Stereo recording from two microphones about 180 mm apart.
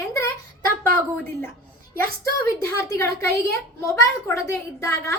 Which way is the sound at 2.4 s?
15° left (ahead or behind).